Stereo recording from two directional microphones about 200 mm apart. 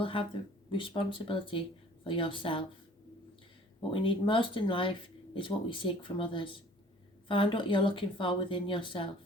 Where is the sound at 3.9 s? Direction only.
25° left (ahead or behind).